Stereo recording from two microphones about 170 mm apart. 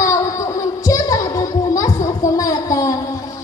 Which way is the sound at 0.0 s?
20° left (ahead or behind).